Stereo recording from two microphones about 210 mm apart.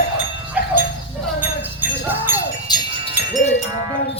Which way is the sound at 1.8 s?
10° right (ahead or behind).